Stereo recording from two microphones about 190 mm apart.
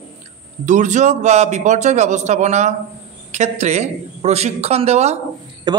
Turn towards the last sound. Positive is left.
turn(degrees=-20)  # may be behind; listen again after turning